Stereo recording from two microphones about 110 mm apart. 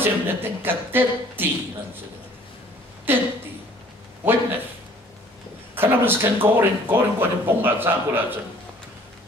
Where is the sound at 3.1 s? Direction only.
20° right (ahead or behind).